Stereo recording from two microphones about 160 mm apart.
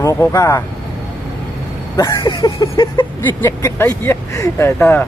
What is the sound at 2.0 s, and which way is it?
Speech, 20° left (ahead or behind).